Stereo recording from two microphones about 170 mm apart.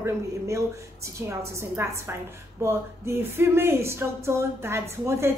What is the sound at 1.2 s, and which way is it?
A woman's voice, 15° right (ahead or behind).